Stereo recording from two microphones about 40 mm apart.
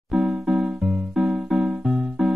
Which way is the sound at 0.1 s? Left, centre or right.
Right.